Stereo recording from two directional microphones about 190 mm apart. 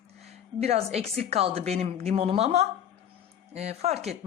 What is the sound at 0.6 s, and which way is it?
A woman's voice, 35° right (ahead or behind).